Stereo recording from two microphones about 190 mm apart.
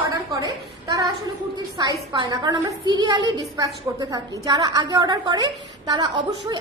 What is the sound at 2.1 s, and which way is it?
A woman's voice, 20° right (ahead or behind).